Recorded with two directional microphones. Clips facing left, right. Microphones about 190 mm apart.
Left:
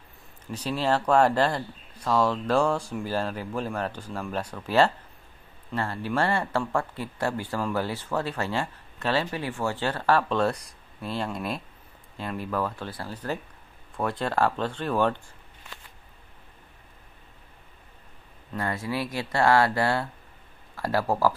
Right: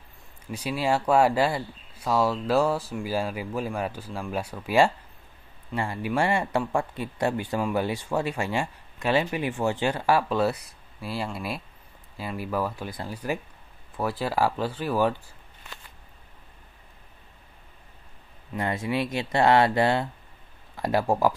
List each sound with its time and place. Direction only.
0.5 s speech: 10° right (ahead or behind)
18.5 s speech: 20° right (ahead or behind)